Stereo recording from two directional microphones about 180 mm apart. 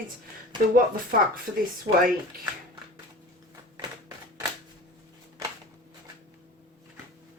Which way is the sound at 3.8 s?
25° right (ahead or behind).